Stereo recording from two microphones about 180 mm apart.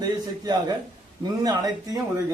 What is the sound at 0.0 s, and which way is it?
A man's voice, 20° right (ahead or behind).